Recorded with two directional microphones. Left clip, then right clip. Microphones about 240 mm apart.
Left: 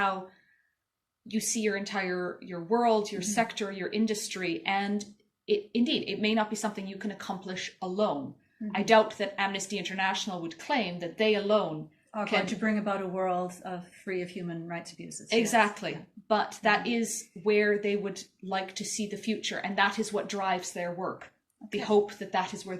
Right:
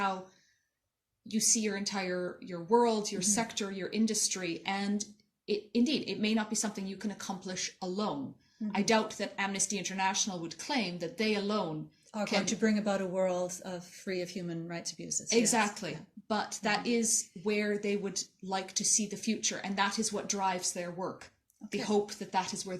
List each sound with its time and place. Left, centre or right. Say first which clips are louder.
1.3 s a woman's voice: left 1 dB; right
12.6 s speech: left 1 dB; right
15.3 s a woman's voice: left 4 dB; right